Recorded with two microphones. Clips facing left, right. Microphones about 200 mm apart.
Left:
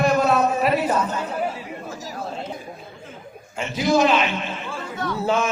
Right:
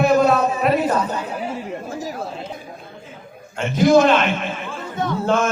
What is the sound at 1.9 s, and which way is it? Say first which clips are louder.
Chatter: right 6 dB; 55° right (ahead or behind).